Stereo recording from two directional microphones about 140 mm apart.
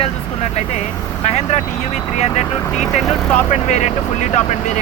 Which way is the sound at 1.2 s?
50° left (ahead or behind).